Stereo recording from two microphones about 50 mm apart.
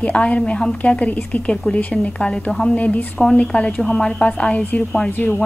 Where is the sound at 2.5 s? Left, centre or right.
Centre.